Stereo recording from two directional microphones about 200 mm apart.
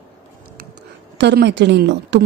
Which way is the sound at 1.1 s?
60° right (ahead or behind).